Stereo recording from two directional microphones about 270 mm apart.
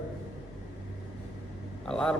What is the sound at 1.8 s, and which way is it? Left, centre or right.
Speech, centre.